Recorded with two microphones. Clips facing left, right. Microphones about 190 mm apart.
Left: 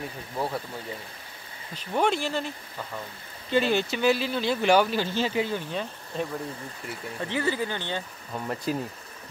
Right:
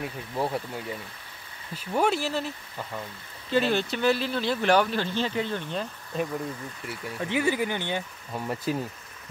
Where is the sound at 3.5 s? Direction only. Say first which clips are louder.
Left 1 dB; centre (ahead or behind).